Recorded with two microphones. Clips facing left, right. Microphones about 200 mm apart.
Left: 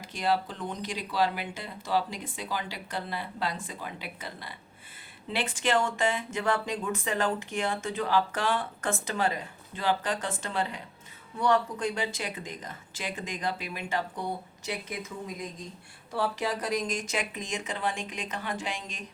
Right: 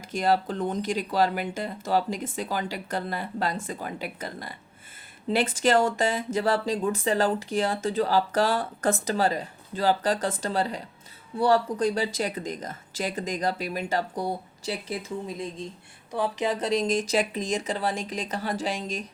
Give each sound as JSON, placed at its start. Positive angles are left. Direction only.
{"t": 0.0, "sound": "speech", "side_deg": -45}
{"t": 16.1, "sound": "speech", "side_deg": -20}